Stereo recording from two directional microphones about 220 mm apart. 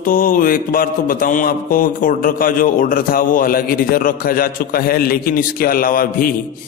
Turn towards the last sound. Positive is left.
turn(degrees=40)  # may be behind; listen again after turning